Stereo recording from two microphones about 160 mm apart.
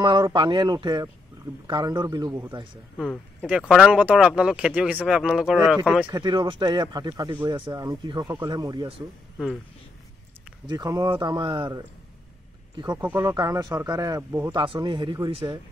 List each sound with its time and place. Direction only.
0.0 s a man's voice: 30° right (ahead or behind)
3.0 s speech: 5° left (ahead or behind)
3.4 s speech: 5° right (ahead or behind)
6.0 s a man's voice: 30° right (ahead or behind)
10.7 s a man's voice: 25° right (ahead or behind)
13.0 s a man's voice: 15° right (ahead or behind)